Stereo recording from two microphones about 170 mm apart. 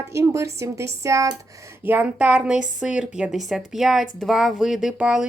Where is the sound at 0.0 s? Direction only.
15° right (ahead or behind).